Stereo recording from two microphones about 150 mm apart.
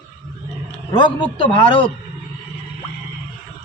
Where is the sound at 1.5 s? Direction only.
35° left (ahead or behind).